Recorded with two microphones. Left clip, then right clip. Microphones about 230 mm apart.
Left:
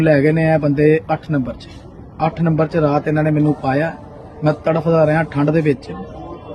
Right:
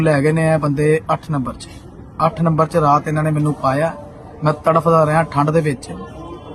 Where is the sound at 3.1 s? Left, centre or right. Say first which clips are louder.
Left 3 dB; centre.